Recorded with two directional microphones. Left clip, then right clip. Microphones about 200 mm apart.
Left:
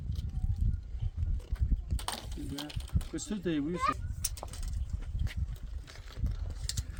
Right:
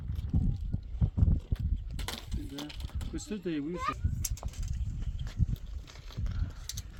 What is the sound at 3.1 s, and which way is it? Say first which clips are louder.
Speech: left 1 dB; 10° left (ahead or behind).